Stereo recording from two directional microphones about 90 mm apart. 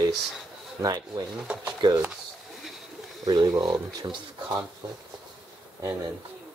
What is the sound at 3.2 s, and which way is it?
Speech, 50° right (ahead or behind).